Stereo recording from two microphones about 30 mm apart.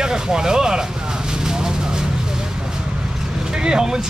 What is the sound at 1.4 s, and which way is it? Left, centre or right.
Vehicle, right.